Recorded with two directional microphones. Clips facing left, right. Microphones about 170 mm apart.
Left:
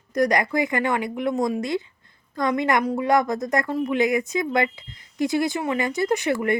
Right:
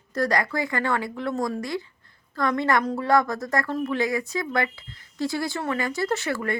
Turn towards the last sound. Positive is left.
turn(degrees=20)  # may be behind; listen again after turning